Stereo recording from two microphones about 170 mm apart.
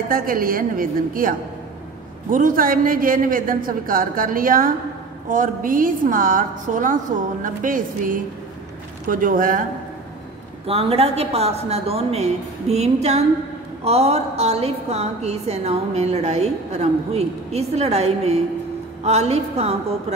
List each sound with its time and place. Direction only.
0.1 s a woman's voice: 60° right (ahead or behind)
2.3 s a woman's voice: 55° right (ahead or behind)
10.7 s a woman's voice: 35° right (ahead or behind)